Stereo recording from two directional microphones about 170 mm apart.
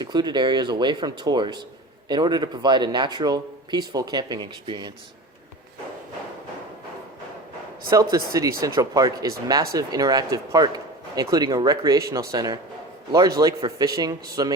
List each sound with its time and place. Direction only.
0.0 s speech: 25° right (ahead or behind)
8.3 s speech: 20° right (ahead or behind)